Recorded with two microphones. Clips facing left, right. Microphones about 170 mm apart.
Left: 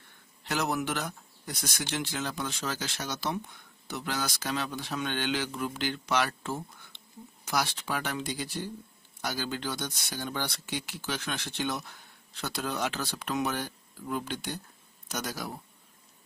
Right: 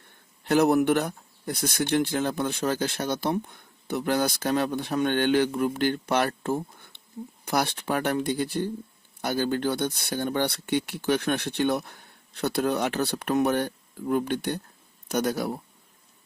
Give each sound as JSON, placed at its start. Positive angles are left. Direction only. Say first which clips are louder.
{"t": 0.4, "sound": "speech", "louder": "right 11 dB", "side_deg": -55}